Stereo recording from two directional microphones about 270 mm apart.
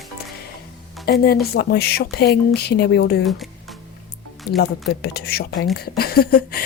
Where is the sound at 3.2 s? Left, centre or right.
Centre.